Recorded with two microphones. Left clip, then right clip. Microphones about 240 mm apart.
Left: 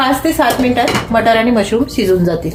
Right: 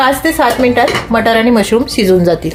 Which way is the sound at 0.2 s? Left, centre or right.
Right.